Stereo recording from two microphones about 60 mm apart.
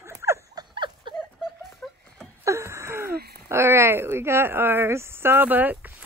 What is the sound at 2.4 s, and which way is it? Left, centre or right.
Speech, right.